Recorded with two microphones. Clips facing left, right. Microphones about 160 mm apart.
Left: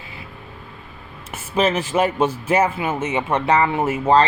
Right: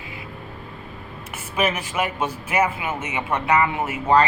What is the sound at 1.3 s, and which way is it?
Speech, 30° left (ahead or behind).